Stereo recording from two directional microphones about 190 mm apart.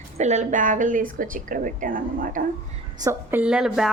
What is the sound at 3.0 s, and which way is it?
Speech, 10° right (ahead or behind).